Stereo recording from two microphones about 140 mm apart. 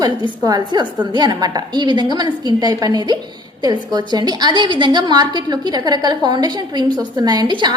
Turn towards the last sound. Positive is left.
turn(degrees=-35)  # may be behind; listen again after turning